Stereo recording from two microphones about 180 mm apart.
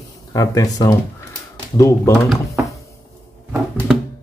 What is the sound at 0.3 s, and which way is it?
Speech, 20° left (ahead or behind).